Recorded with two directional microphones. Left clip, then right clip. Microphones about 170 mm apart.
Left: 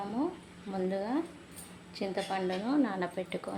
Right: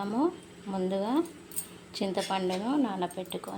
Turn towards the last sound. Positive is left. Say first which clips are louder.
# right 1 dB
turn(degrees=0)  # may be behind; listen again after turning